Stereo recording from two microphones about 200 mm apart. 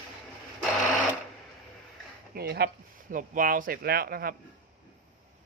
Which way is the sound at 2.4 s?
55° right (ahead or behind).